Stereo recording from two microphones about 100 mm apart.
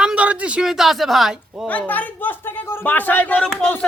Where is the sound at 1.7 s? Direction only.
15° left (ahead or behind).